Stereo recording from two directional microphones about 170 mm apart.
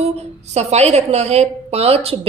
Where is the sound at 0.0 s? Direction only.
40° right (ahead or behind).